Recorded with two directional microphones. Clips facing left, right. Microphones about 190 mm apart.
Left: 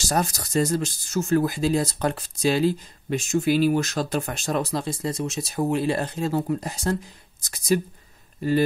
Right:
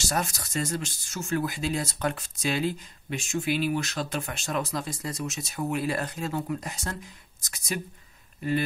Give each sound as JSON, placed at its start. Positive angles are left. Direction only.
{"t": 0.1, "sound": "speech", "side_deg": 35}
{"t": 7.4, "sound": "a sound", "side_deg": 35}
{"t": 8.4, "sound": "speech", "side_deg": 35}